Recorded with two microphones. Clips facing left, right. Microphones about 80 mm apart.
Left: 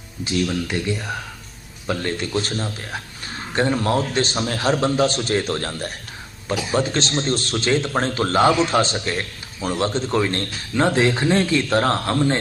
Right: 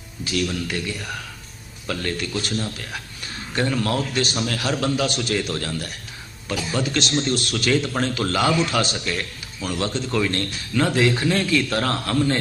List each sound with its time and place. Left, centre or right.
0.3 s a man's voice: left